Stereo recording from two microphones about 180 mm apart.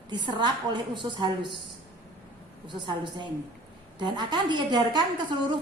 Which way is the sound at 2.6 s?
25° right (ahead or behind).